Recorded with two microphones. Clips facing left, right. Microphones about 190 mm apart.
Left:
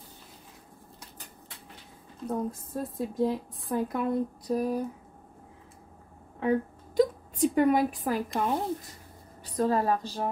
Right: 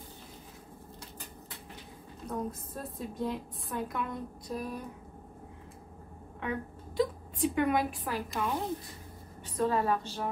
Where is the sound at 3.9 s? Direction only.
40° left (ahead or behind).